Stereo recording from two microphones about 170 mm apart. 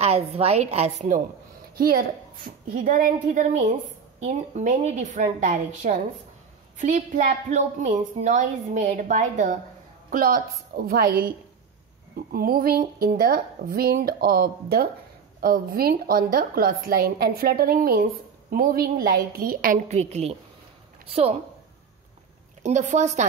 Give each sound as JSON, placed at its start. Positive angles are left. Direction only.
{"t": 0.0, "sound": "a woman's voice", "side_deg": -35}
{"t": 1.8, "sound": "a woman's voice", "side_deg": -60}
{"t": 22.6, "sound": "a woman's voice", "side_deg": -45}